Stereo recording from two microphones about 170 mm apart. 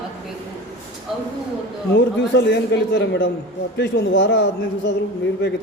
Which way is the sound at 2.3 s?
85° left.